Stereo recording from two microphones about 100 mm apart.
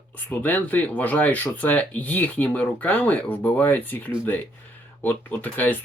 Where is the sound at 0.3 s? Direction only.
15° left (ahead or behind).